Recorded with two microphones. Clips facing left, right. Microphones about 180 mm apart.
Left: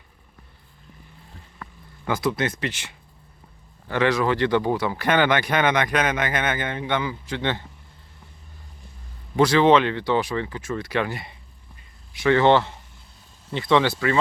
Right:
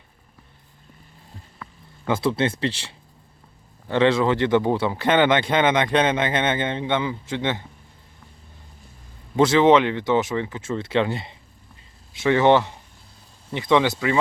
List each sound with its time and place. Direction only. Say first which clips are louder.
2.0 s speech: right 2 dB; 30° right (ahead or behind)
9.3 s speech: right 1 dB; 25° right (ahead or behind)